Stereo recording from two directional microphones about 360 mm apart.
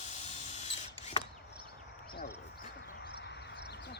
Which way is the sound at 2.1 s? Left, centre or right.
Left.